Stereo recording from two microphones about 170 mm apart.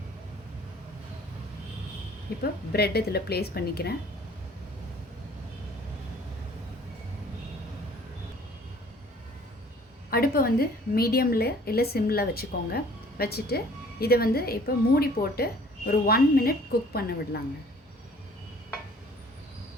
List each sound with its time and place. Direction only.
2.4 s a woman's voice: 70° left (ahead or behind)
10.1 s a woman's voice: 60° left (ahead or behind)